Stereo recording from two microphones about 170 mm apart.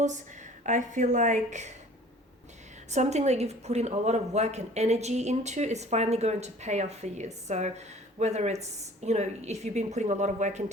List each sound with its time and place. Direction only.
0.6 s a woman's voice: 45° right (ahead or behind)
2.9 s a woman's voice: 40° right (ahead or behind)